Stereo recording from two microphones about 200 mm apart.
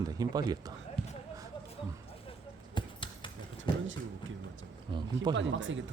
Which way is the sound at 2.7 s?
25° left (ahead or behind).